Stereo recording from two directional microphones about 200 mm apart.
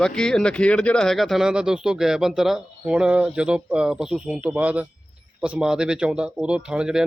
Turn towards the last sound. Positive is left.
turn(degrees=-5)  # may be behind; listen again after turning